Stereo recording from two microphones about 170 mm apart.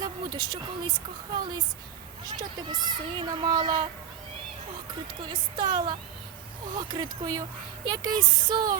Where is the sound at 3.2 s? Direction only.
25° right (ahead or behind).